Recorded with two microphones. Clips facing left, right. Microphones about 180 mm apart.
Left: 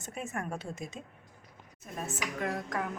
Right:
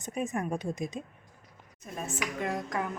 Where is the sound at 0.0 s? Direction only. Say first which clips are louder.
Right 5 dB; 15° right (ahead or behind).